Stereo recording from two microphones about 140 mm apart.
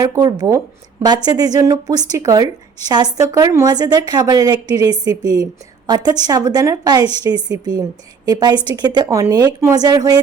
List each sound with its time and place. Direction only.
0.0 s speech: 25° right (ahead or behind)